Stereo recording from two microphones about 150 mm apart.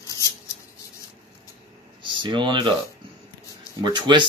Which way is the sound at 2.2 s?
30° right (ahead or behind).